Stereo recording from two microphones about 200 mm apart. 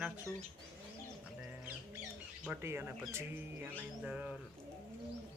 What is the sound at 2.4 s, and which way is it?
Speech, 10° right (ahead or behind).